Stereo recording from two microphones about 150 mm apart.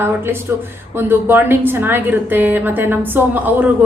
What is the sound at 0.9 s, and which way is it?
A woman's voice, 15° right (ahead or behind).